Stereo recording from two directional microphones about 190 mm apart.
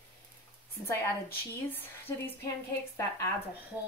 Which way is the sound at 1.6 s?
10° left (ahead or behind).